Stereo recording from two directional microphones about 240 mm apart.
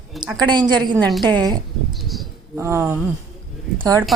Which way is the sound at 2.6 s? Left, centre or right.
Centre.